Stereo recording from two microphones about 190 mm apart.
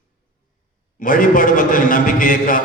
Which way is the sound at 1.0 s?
45° left (ahead or behind).